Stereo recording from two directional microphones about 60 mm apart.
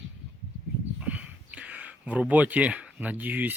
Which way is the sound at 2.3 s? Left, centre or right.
Right.